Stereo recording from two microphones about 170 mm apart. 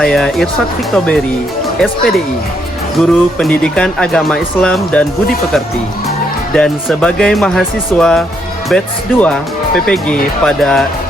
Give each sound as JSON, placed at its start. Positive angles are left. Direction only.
{"t": 0.0, "sound": "speech", "side_deg": 5}
{"t": 6.5, "sound": "speech", "side_deg": 5}